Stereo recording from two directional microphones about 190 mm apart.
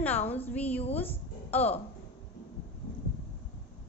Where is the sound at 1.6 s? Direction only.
30° left (ahead or behind).